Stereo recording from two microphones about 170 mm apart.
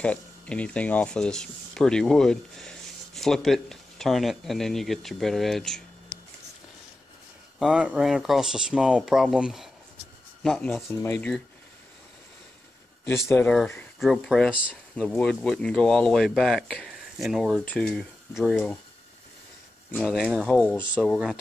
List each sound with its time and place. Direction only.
0.0 s speech: 5° left (ahead or behind)
7.5 s speech: 5° right (ahead or behind)
13.3 s speech: 5° left (ahead or behind)
19.9 s speech: centre (ahead or behind)